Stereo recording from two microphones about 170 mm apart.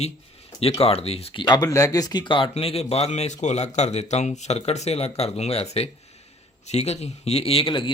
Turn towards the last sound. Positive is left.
turn(degrees=30)  # may be behind; listen again after turning